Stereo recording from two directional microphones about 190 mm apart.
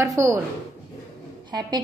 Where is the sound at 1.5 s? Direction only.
25° right (ahead or behind).